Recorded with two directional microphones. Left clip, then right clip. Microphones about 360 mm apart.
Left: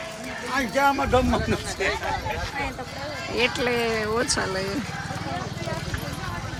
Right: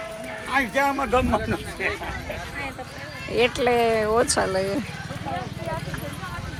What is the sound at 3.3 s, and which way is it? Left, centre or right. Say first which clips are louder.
Speech: right 3 dB; centre.